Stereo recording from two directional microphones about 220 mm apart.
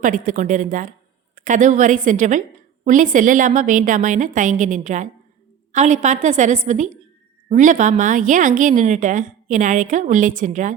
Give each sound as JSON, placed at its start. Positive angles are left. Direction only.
{"t": 0.0, "sound": "a woman's voice", "side_deg": -35}